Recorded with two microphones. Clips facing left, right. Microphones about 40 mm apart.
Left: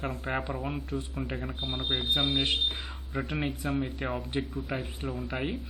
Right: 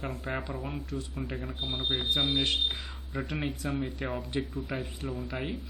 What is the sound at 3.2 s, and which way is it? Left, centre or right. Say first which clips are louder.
Speech: left 2 dB; centre.